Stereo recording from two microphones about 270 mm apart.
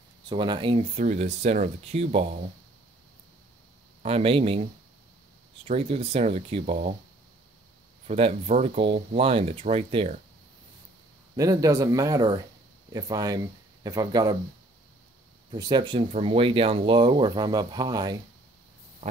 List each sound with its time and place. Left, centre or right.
0.3 s speech: centre
4.0 s speech: right
5.7 s speech: right
8.1 s speech: right
11.3 s speech: centre
15.5 s speech: centre